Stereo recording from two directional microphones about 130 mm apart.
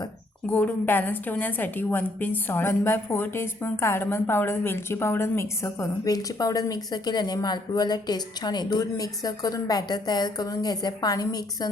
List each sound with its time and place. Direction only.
0.4 s a woman's voice: 15° left (ahead or behind)